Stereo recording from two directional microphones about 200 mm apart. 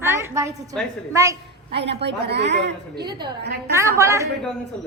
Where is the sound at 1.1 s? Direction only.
15° right (ahead or behind).